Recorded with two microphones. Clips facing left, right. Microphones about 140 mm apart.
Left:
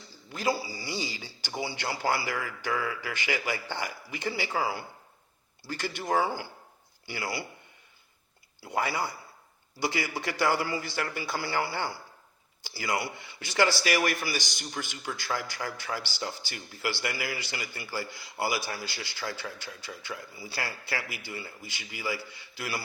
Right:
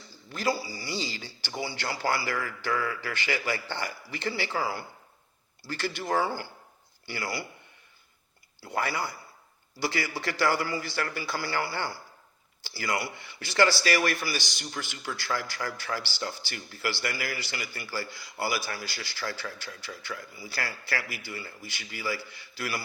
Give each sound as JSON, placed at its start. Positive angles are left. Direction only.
{"t": 0.3, "sound": "a man's voice", "side_deg": 20}
{"t": 8.6, "sound": "a man's voice", "side_deg": 15}